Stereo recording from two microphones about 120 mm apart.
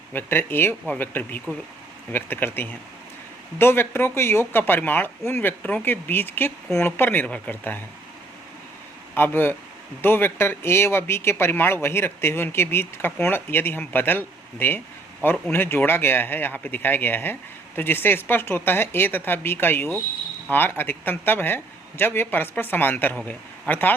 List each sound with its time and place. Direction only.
0.1 s speech: 15° left (ahead or behind)
9.1 s a man's voice: 20° left (ahead or behind)